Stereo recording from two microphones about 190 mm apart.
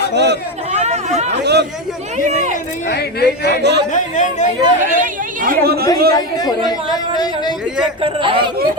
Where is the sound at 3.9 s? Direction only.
40° left (ahead or behind).